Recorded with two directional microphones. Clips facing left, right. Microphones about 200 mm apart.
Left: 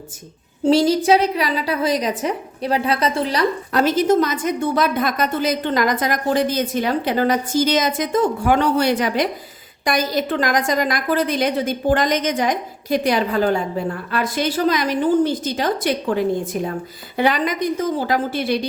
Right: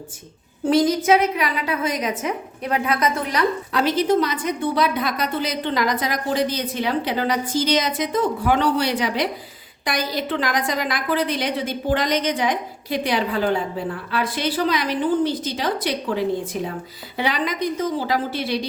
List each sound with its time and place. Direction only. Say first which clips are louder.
0.6 s a woman's voice: left 3 dB; 30° left (ahead or behind)
3.7 s a woman's voice: left 4 dB; 45° left (ahead or behind)